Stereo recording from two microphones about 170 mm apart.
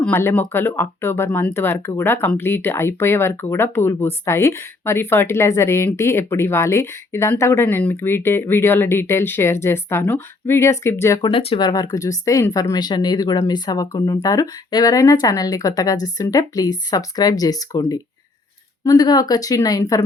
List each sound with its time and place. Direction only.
0.0 s speech: 15° left (ahead or behind)
11.3 s speech: 30° left (ahead or behind)